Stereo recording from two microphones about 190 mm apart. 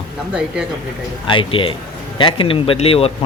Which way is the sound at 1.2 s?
25° left (ahead or behind).